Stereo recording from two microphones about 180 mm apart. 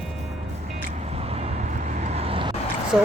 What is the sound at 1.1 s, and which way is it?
Vehicle, 35° right (ahead or behind).